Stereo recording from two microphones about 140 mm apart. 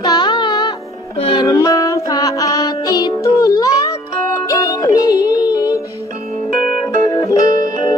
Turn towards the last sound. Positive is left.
turn(degrees=25)  # may be behind; listen again after turning